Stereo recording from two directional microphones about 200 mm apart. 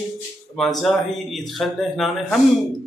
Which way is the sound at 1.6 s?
Centre (ahead or behind).